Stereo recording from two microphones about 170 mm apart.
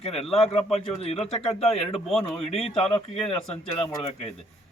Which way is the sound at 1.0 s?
35° left (ahead or behind).